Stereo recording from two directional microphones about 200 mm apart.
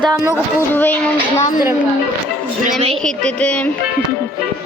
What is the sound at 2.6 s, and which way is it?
Speech, 35° right (ahead or behind).